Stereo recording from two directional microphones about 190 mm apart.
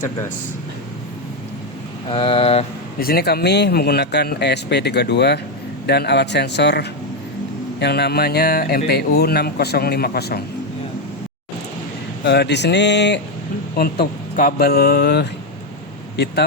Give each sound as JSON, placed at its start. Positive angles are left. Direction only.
{"t": 2.0, "sound": "speech", "side_deg": 30}
{"t": 3.0, "sound": "speech", "side_deg": 55}
{"t": 12.2, "sound": "speech", "side_deg": 60}
{"t": 13.7, "sound": "speech", "side_deg": 55}